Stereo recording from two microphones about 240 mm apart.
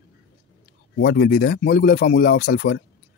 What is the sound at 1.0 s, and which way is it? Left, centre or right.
Speech, left.